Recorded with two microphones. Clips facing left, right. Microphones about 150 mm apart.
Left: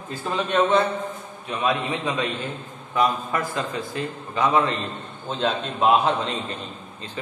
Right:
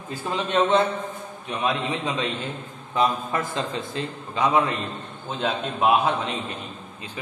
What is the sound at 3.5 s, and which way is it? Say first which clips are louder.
A man's voice: even; 25° right (ahead or behind).